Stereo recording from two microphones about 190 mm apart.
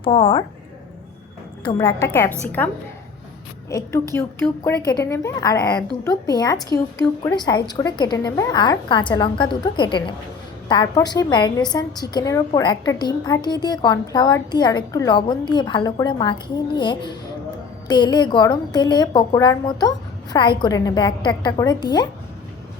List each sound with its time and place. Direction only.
0.0 s a woman's voice: 30° left (ahead or behind)
1.9 s a woman's voice: 15° left (ahead or behind)